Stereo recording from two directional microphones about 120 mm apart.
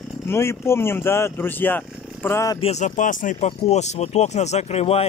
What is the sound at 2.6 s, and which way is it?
Speech, 70° left (ahead or behind).